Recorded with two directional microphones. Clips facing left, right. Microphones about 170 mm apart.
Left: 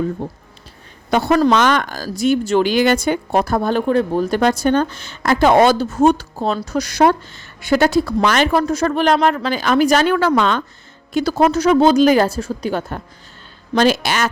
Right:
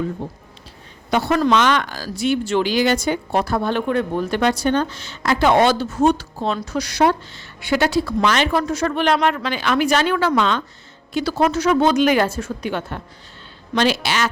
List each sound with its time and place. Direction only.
0.2 s speech: 45° left (ahead or behind)
13.7 s speech: 45° left (ahead or behind)